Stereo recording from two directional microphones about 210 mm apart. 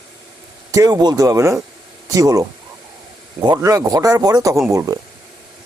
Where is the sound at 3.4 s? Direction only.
15° right (ahead or behind).